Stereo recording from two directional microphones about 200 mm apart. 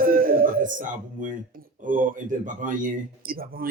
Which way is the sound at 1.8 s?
40° right (ahead or behind).